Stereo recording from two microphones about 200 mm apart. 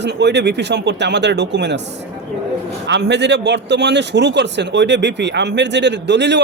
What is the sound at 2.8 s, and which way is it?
A man's voice, 60° right (ahead or behind).